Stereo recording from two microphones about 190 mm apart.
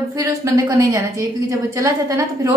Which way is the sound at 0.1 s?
15° right (ahead or behind).